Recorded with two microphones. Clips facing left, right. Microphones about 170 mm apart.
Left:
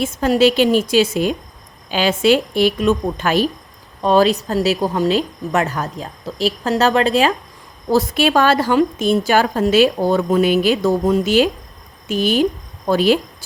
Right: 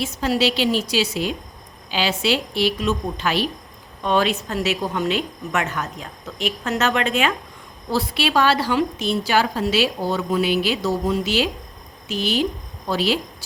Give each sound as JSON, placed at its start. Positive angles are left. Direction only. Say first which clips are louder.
{"t": 0.0, "sound": "a woman's voice", "louder": "left 7 dB", "side_deg": 50}
{"t": 7.9, "sound": "a woman's voice", "louder": "left 7 dB", "side_deg": 45}